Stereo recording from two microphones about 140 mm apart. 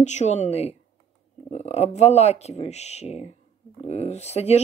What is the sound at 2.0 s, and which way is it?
Speech, 50° left (ahead or behind).